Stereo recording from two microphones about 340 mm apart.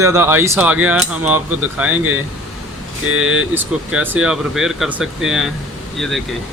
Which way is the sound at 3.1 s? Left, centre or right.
Right.